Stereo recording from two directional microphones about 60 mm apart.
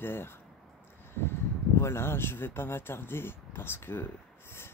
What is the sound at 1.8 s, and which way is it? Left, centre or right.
Speech, left.